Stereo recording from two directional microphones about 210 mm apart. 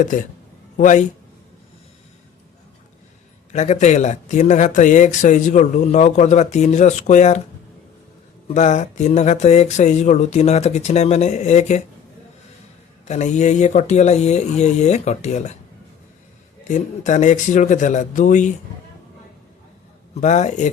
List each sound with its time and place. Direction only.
0.8 s speech: 35° left (ahead or behind)
3.5 s speech: 35° left (ahead or behind)
8.4 s speech: 35° left (ahead or behind)
13.1 s speech: 35° left (ahead or behind)
16.6 s speech: 35° left (ahead or behind)
20.2 s speech: 35° left (ahead or behind)